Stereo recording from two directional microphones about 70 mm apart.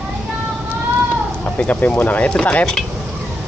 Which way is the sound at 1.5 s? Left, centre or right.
Left.